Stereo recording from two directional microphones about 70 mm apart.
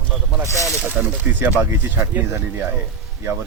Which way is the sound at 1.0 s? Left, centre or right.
Right.